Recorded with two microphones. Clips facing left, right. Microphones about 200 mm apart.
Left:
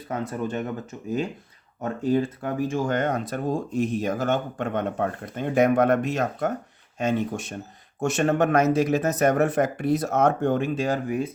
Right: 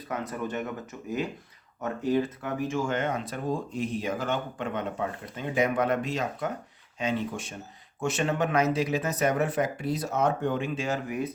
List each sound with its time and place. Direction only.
0.1 s speech: 25° left (ahead or behind)